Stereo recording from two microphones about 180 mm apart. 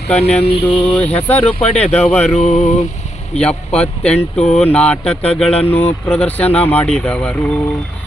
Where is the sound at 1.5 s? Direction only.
30° left (ahead or behind).